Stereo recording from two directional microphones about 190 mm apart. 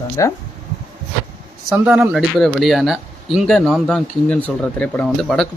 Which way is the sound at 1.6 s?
5° right (ahead or behind).